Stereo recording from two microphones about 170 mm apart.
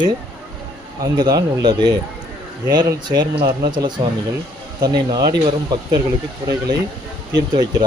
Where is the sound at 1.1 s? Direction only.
25° right (ahead or behind).